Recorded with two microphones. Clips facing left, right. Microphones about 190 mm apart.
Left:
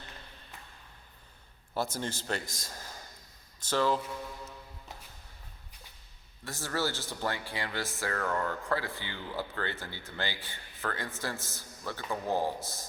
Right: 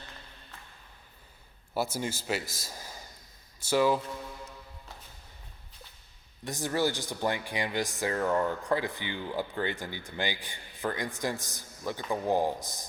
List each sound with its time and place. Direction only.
1.7 s speech: 10° right (ahead or behind)
6.4 s speech: 15° right (ahead or behind)